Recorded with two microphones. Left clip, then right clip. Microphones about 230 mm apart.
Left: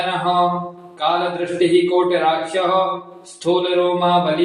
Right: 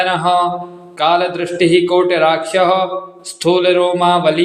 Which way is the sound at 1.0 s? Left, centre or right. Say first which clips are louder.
Right 5 dB; right.